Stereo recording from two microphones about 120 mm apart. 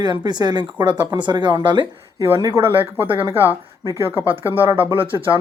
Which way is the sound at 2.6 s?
15° right (ahead or behind).